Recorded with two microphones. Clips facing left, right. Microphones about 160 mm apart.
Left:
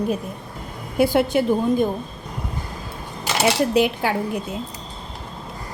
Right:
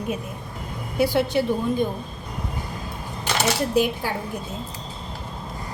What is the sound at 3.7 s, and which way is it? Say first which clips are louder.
Speech: left 3 dB; 75° left (ahead or behind).